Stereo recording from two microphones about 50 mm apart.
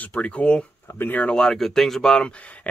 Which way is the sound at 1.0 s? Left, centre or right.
Left.